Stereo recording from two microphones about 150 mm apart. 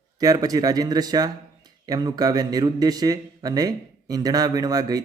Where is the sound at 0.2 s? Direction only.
25° right (ahead or behind).